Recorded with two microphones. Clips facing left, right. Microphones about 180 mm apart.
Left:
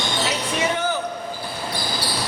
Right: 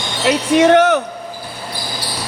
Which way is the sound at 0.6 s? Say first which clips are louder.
Right 13 dB; 80° right.